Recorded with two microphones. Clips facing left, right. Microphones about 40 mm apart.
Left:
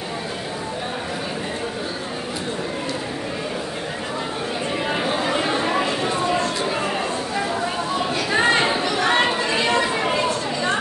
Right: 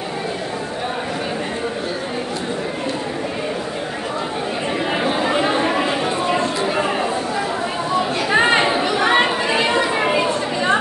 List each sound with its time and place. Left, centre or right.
4.9 s chatter: centre
8.3 s chatter: right